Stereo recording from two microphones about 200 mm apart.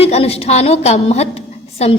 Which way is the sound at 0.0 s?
30° left (ahead or behind).